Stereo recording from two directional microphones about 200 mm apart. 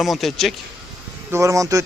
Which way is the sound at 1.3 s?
15° right (ahead or behind).